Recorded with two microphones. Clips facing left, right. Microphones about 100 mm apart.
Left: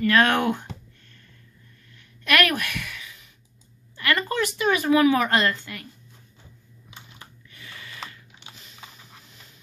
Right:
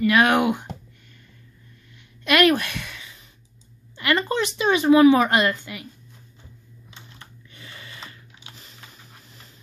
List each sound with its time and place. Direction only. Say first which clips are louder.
0.0 s speech: right 2 dB; 15° right (ahead or behind)
2.2 s speech: right 4 dB; 20° right (ahead or behind)